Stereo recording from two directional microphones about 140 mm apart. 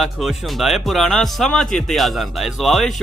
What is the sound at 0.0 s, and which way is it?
Speech, centre (ahead or behind).